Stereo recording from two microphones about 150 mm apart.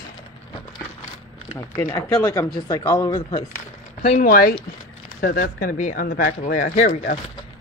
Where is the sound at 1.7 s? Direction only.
15° left (ahead or behind).